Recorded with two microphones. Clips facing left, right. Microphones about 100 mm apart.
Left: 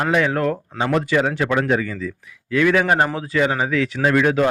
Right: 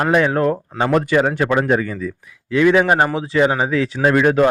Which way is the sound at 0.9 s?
45° right (ahead or behind).